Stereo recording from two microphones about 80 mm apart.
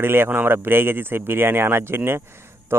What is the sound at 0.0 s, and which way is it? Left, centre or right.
Speech, right.